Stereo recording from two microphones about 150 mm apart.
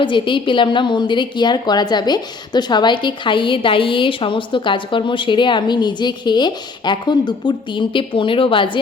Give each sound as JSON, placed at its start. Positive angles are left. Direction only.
{"t": 0.0, "sound": "a woman's voice", "side_deg": 35}